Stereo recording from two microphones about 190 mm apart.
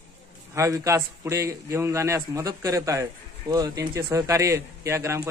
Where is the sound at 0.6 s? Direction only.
15° right (ahead or behind).